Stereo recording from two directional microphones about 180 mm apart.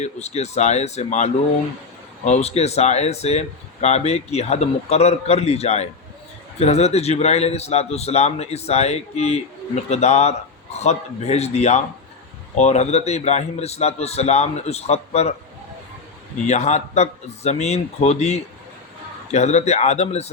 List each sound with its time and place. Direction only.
0.0 s speech: 35° left (ahead or behind)
16.5 s speech: 40° left (ahead or behind)